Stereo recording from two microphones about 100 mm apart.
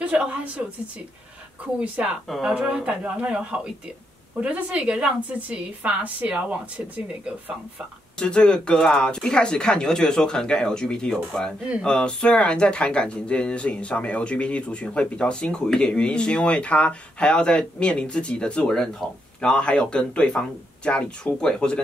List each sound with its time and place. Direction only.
0.0 s a woman's voice: 15° right (ahead or behind)
1.8 s a woman's voice: 10° right (ahead or behind)
8.2 s speech: 10° left (ahead or behind)